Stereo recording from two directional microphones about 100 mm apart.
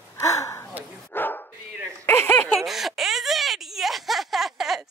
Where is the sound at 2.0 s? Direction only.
25° left (ahead or behind).